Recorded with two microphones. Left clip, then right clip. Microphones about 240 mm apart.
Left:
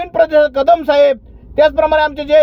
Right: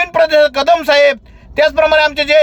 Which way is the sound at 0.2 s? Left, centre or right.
Centre.